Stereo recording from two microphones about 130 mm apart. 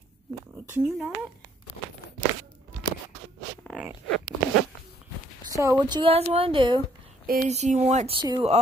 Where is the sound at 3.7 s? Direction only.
10° right (ahead or behind).